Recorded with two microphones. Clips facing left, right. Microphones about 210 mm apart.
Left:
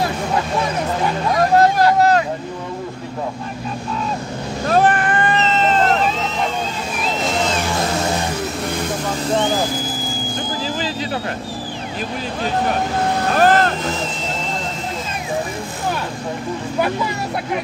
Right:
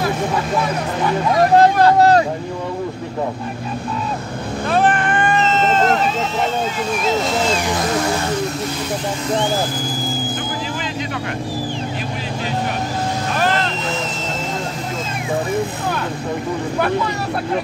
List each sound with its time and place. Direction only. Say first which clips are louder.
2.0 s vehicle: right 2 dB; 35° right (ahead or behind)
4.6 s vehicle: left 1 dB; 40° left (ahead or behind)
13.4 s vehicle: left 6 dB; 45° left (ahead or behind)